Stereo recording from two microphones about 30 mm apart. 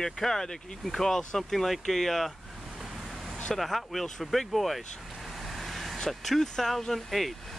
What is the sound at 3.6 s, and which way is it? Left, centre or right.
Speech, centre.